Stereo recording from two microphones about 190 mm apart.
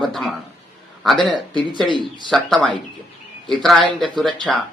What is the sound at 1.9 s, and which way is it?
Speech, 25° left (ahead or behind).